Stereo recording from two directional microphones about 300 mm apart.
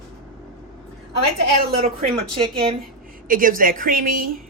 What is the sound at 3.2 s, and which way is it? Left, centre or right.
Speech, right.